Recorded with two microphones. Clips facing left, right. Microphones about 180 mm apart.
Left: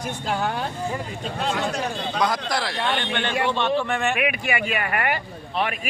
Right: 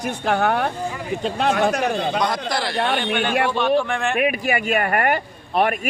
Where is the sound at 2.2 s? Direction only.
Centre (ahead or behind).